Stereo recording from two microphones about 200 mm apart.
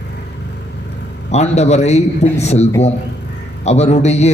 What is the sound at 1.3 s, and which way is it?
Speech, 35° left (ahead or behind).